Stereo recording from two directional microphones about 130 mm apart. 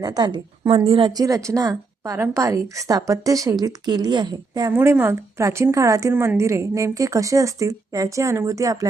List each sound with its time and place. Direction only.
0.0 s a woman's voice: 30° right (ahead or behind)
4.8 s a woman's voice: 20° right (ahead or behind)